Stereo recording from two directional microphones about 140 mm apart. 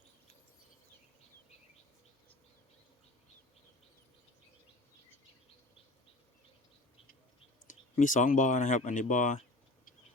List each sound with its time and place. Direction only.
7.7 s speech: 65° left (ahead or behind)